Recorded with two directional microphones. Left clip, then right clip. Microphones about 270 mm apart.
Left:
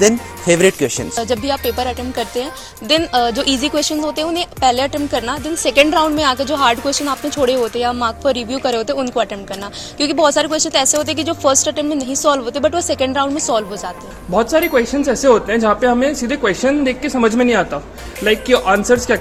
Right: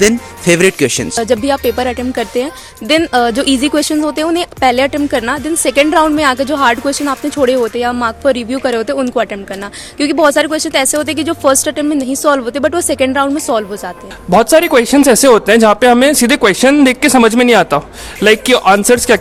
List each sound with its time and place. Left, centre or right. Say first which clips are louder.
0.9 s speech: right 6 dB; right